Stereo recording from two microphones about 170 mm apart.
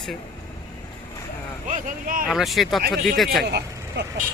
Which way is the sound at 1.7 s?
50° right (ahead or behind).